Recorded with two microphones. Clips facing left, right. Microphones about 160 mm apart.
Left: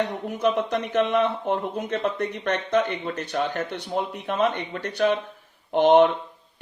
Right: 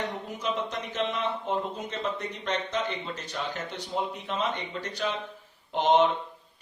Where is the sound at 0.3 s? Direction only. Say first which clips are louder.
Left 10 dB; 60° left (ahead or behind).